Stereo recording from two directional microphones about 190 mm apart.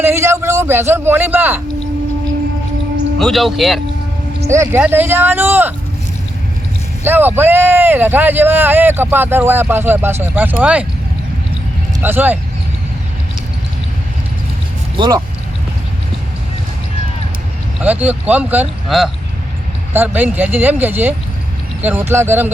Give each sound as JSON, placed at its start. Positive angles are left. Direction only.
{"t": 0.0, "sound": "a man's voice", "side_deg": -15}
{"t": 3.2, "sound": "speech", "side_deg": 0}
{"t": 4.4, "sound": "speech", "side_deg": -15}
{"t": 7.0, "sound": "speech", "side_deg": -10}
{"t": 12.0, "sound": "speech", "side_deg": -10}
{"t": 14.9, "sound": "speech", "side_deg": -20}
{"t": 17.8, "sound": "speech", "side_deg": -10}